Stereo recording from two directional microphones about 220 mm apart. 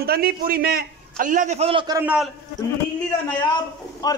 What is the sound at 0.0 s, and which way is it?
A man's voice, 45° right (ahead or behind).